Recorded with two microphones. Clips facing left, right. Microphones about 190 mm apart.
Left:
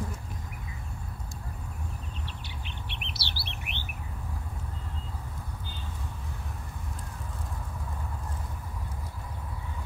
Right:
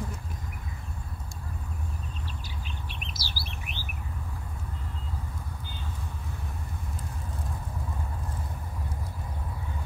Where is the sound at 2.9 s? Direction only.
65° left (ahead or behind).